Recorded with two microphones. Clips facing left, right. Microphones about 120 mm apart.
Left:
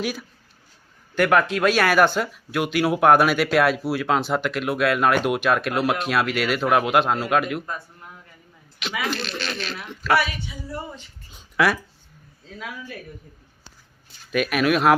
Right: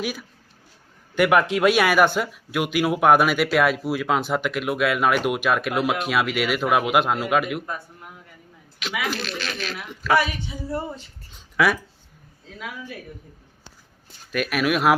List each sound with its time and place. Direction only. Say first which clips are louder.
0.0 s speech: left 1 dB; 10° right (ahead or behind)
8.8 s speech: even; 5° right (ahead or behind)
10.2 s a woman's voice: right 2 dB; 30° right (ahead or behind)
11.5 s speech: even; centre (ahead or behind)
14.3 s speech: left 2 dB; centre (ahead or behind)